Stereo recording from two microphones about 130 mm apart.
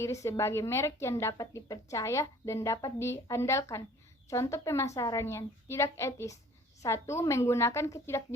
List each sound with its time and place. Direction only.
0.0 s speech: 20° left (ahead or behind)